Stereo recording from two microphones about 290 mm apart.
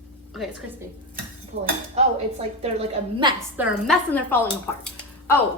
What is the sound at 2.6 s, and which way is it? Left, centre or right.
Speech, right.